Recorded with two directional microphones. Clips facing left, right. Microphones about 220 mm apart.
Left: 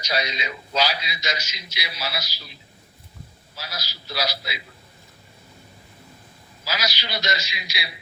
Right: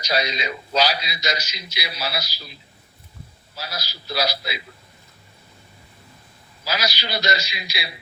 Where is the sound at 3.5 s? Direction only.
35° right (ahead or behind).